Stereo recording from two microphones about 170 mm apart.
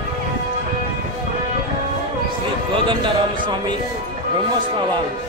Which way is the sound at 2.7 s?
30° right (ahead or behind).